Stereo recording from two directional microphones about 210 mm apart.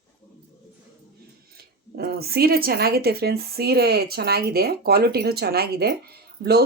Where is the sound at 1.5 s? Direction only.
50° right (ahead or behind).